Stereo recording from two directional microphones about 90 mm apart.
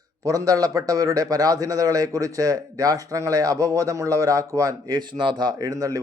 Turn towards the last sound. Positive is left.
turn(degrees=-40)  # may be behind; listen again after turning